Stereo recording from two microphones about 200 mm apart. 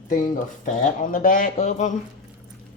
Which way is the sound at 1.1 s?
45° left (ahead or behind).